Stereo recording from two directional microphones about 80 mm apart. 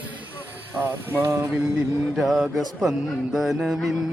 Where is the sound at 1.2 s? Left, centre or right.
Right.